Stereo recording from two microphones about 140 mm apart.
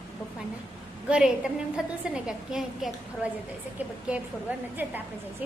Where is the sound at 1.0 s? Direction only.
5° right (ahead or behind).